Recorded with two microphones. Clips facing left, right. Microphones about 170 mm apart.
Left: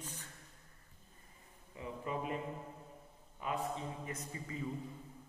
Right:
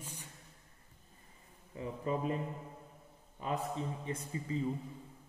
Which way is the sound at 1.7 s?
35° right (ahead or behind).